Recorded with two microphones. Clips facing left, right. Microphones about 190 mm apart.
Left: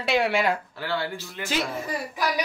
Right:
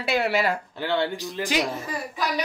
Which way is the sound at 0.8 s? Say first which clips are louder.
Right 4 dB; 20° right (ahead or behind).